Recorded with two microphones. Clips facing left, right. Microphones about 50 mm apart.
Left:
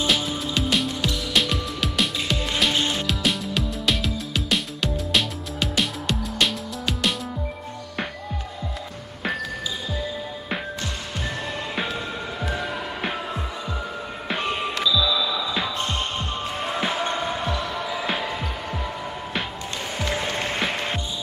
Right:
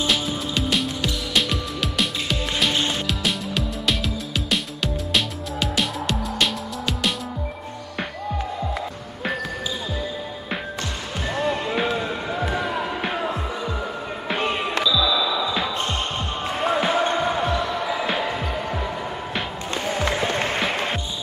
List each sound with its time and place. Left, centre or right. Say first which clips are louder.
0.0 s music: even; centre
12.4 s music: right 3 dB; right
14.4 s music: right 2 dB; right
17.0 s basketball bounce: right 4 dB; centre
20.2 s music: right 3 dB; right